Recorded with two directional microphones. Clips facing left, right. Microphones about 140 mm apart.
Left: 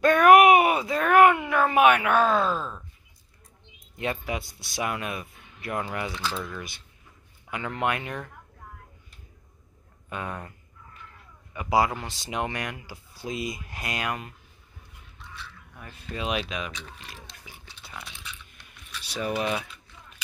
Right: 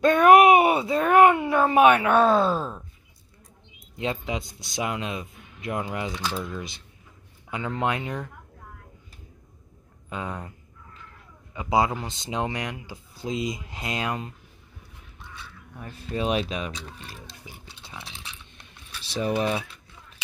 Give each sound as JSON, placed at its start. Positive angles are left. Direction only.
{"t": 0.0, "sound": "speech", "side_deg": -25}
{"t": 4.0, "sound": "speech", "side_deg": -20}
{"t": 10.0, "sound": "speech", "side_deg": -20}
{"t": 11.5, "sound": "speech", "side_deg": -20}
{"t": 15.7, "sound": "speech", "side_deg": -30}
{"t": 17.4, "sound": "a sound", "side_deg": -25}